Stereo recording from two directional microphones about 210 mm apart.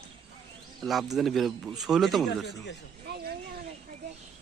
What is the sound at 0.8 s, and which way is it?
Speech, centre (ahead or behind).